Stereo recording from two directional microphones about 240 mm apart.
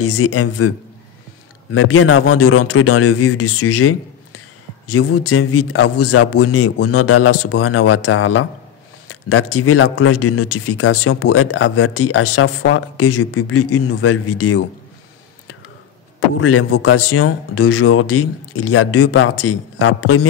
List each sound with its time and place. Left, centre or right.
0.0 s speech: left
16.3 s speech: left